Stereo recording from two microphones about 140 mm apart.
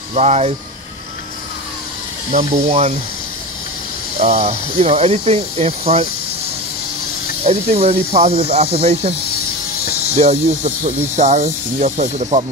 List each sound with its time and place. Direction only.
0.1 s speech: 50° right (ahead or behind)
2.3 s speech: 50° right (ahead or behind)
4.2 s speech: 50° right (ahead or behind)
7.4 s speech: 50° right (ahead or behind)
10.1 s speech: 50° right (ahead or behind)